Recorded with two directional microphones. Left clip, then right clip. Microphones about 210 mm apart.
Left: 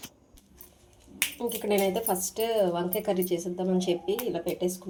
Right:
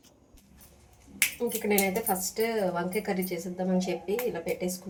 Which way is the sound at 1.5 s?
30° left (ahead or behind).